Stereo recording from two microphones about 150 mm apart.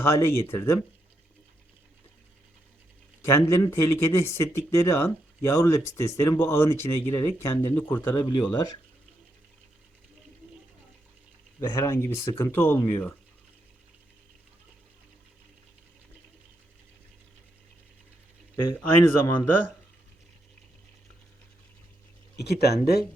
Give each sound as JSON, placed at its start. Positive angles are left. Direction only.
{"t": 0.0, "sound": "speech", "side_deg": 15}
{"t": 3.2, "sound": "speech", "side_deg": 20}
{"t": 11.8, "sound": "speech", "side_deg": 15}
{"t": 18.8, "sound": "speech", "side_deg": 15}
{"t": 22.4, "sound": "speech", "side_deg": 90}